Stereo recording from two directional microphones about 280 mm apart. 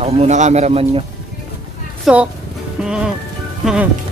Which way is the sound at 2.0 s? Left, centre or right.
Centre.